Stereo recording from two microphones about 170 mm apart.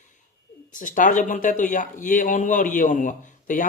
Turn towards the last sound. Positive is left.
turn(degrees=50)  # may be behind; listen again after turning